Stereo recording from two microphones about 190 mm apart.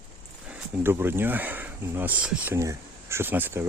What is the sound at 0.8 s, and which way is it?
Speech, 10° right (ahead or behind).